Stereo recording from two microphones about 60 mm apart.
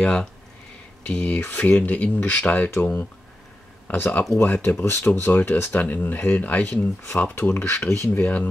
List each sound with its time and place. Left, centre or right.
0.0 s speech: centre
2.8 s speech: centre
3.8 s speech: left
8.2 s speech: left